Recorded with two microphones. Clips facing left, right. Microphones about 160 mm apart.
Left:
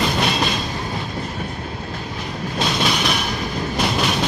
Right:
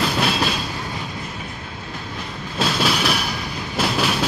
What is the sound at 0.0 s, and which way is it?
Train, 5° right (ahead or behind).